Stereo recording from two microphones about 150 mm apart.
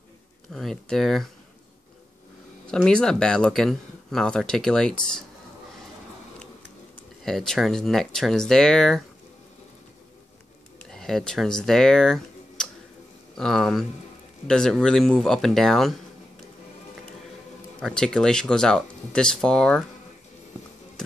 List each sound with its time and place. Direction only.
0.5 s speech: 5° left (ahead or behind)
2.7 s speech: 5° left (ahead or behind)
7.2 s speech: centre (ahead or behind)
10.9 s speech: centre (ahead or behind)
17.7 s speech: 5° left (ahead or behind)